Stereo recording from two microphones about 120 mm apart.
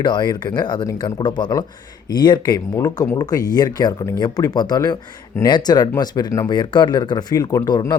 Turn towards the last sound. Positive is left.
turn(degrees=30)  # may be behind; listen again after turning